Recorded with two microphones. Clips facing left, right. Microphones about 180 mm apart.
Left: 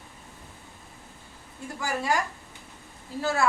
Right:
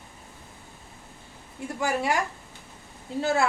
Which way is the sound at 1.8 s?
20° right (ahead or behind).